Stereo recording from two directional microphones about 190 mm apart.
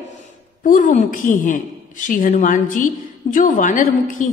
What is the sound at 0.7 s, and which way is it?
A woman's voice, 45° left (ahead or behind).